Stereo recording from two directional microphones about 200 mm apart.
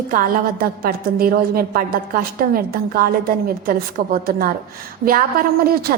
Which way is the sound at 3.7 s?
50° right (ahead or behind).